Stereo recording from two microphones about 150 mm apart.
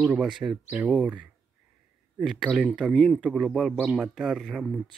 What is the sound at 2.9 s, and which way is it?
Speech, 5° left (ahead or behind).